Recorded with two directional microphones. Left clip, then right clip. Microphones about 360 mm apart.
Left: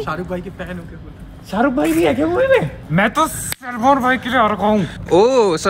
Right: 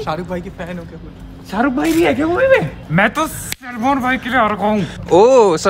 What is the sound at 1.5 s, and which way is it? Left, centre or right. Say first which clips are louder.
Speech: even; centre.